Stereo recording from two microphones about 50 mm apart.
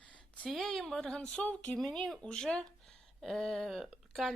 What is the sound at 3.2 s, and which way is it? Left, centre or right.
Speech, centre.